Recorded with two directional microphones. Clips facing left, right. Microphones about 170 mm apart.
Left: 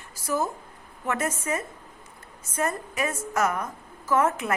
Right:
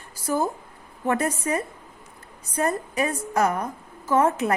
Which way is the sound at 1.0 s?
35° right (ahead or behind).